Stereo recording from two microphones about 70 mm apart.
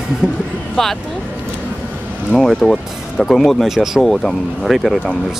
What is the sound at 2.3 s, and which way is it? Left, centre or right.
Speech, centre.